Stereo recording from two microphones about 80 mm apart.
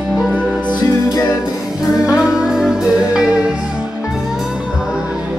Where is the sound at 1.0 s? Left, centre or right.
Left.